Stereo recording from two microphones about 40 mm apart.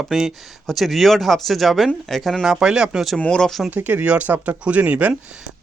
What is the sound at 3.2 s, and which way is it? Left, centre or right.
Speech, centre.